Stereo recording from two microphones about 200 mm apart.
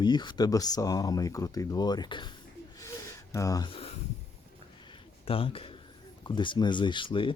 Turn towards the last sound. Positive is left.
turn(degrees=25)  # may be behind; listen again after turning